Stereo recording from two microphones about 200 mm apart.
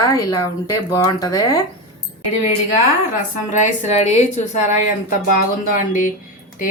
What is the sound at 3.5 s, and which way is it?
A woman's voice, 35° left (ahead or behind).